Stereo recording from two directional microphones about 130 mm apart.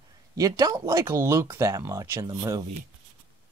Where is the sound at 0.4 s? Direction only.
30° right (ahead or behind).